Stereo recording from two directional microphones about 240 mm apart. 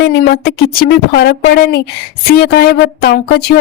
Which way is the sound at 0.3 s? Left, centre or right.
Left.